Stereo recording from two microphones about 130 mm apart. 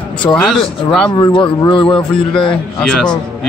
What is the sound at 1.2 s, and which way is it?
Speech, 40° left (ahead or behind).